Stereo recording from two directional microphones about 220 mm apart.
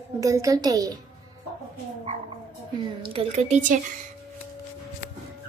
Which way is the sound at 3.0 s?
30° right (ahead or behind).